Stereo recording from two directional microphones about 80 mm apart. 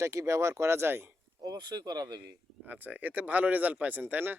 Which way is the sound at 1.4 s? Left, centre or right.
Right.